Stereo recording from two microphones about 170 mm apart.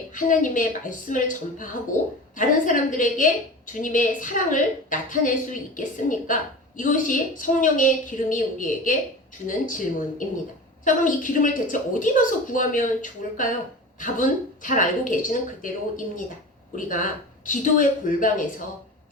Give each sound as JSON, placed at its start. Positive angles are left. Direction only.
{"t": 0.1, "sound": "a woman's voice", "side_deg": 50}
{"t": 16.7, "sound": "a woman's voice", "side_deg": 50}